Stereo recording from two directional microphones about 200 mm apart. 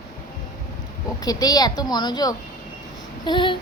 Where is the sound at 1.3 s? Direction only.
20° left (ahead or behind).